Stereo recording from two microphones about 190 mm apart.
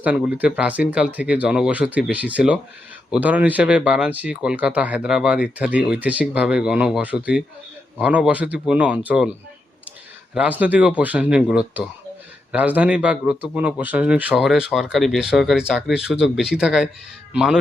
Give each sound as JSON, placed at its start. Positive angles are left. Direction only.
{"t": 0.0, "sound": "speech", "side_deg": -10}
{"t": 10.3, "sound": "a man's voice", "side_deg": -5}